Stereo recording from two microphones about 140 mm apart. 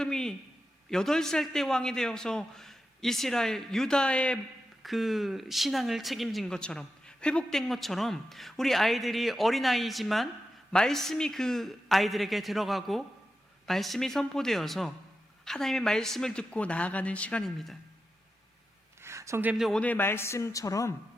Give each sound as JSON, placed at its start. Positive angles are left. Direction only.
{"t": 0.0, "sound": "speech", "side_deg": 5}
{"t": 19.0, "sound": "a sound", "side_deg": -20}
{"t": 19.6, "sound": "a man's voice", "side_deg": 10}